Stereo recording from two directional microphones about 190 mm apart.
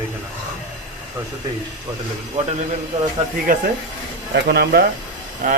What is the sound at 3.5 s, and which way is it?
Speech, 50° right (ahead or behind).